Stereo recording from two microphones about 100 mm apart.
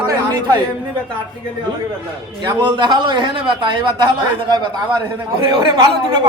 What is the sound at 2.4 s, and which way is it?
A man's voice, 50° right (ahead or behind).